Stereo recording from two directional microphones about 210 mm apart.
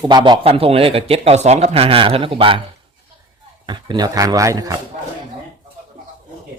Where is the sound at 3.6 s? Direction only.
20° right (ahead or behind).